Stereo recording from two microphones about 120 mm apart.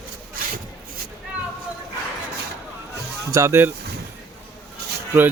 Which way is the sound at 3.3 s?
25° right (ahead or behind).